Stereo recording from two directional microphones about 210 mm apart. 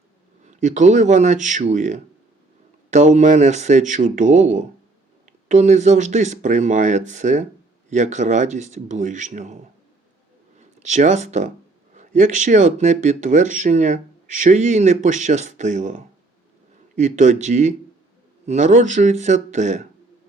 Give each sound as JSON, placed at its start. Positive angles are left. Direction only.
{"t": 0.4, "sound": "speech", "side_deg": -35}
{"t": 10.6, "sound": "speech", "side_deg": -35}